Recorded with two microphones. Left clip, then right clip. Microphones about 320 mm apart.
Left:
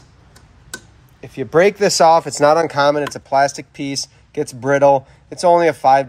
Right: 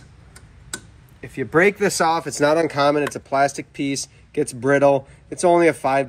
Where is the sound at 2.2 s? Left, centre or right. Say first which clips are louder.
Left 5 dB; left.